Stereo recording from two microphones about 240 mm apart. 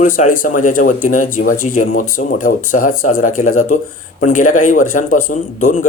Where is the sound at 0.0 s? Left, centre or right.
Left.